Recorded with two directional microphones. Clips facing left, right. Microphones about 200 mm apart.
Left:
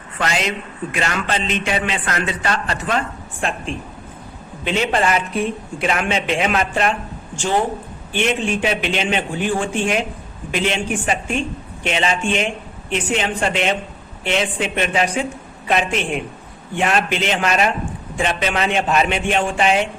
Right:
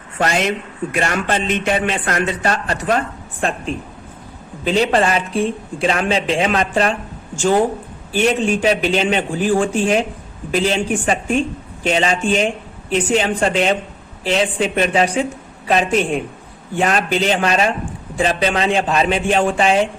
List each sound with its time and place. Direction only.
0.2 s speech: 50° right (ahead or behind)
4.6 s speech: 35° right (ahead or behind)